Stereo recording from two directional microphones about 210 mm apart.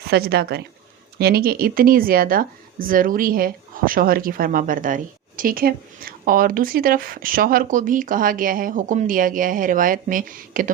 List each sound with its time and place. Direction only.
0.1 s speech: 50° right (ahead or behind)